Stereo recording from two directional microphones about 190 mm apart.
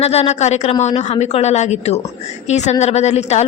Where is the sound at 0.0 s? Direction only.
35° left (ahead or behind).